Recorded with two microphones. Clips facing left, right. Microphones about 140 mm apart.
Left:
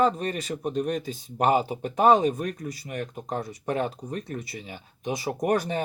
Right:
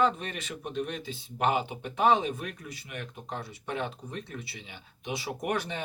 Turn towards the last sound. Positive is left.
turn(degrees=40)  # may be behind; listen again after turning